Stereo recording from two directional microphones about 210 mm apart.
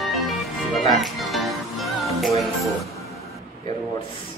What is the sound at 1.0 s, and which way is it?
Music, centre (ahead or behind).